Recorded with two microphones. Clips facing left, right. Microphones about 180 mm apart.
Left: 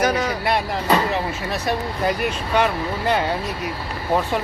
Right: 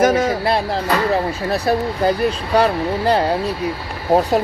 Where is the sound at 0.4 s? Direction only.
30° right (ahead or behind).